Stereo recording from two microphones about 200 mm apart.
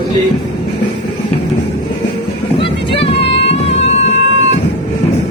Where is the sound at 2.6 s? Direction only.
25° left (ahead or behind).